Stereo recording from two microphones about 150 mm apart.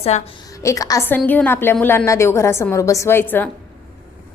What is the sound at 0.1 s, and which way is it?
Speech, 50° left (ahead or behind).